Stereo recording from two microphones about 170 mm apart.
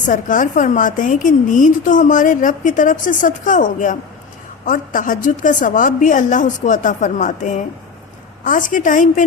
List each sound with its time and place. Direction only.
0.0 s a woman's voice: 50° left (ahead or behind)